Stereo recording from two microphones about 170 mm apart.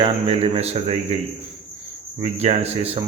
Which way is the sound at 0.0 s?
35° right (ahead or behind).